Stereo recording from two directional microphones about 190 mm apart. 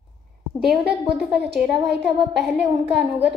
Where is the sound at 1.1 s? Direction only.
60° right (ahead or behind).